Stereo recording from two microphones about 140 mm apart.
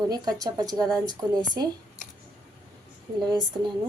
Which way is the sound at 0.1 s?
30° right (ahead or behind).